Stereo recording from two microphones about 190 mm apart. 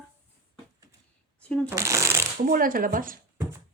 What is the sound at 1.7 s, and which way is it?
Shuffling cards, 15° right (ahead or behind).